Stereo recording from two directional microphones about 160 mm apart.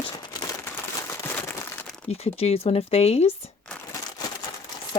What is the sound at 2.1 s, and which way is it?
A woman's voice, 40° left (ahead or behind).